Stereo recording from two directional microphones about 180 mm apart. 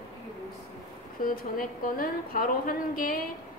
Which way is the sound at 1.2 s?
50° left (ahead or behind).